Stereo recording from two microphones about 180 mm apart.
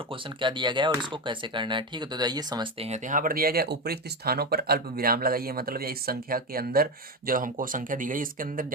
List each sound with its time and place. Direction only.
0.3 s speech: 25° right (ahead or behind)
2.8 s speech: 40° right (ahead or behind)